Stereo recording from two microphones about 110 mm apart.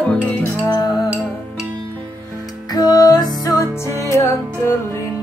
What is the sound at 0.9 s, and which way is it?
Music, 5° right (ahead or behind).